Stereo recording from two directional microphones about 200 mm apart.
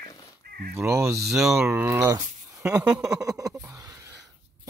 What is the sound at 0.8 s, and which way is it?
Speech, 15° right (ahead or behind).